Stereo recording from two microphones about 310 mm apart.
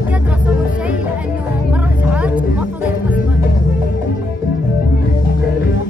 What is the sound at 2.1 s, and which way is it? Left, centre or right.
Music, centre.